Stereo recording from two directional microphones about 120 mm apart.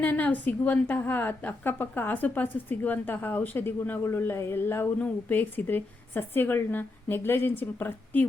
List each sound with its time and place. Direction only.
0.0 s a woman's voice: 15° left (ahead or behind)